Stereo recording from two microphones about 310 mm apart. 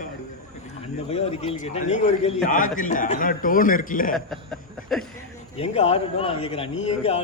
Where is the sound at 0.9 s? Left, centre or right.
Left.